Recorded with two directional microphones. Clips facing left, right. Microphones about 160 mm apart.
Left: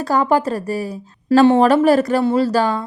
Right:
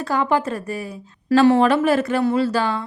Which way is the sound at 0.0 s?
40° left (ahead or behind).